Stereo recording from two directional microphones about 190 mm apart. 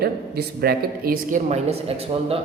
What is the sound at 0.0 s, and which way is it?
Speech, 55° right (ahead or behind).